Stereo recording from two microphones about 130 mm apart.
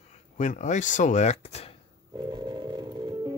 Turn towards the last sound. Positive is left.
turn(degrees=-35)  # may be behind; listen again after turning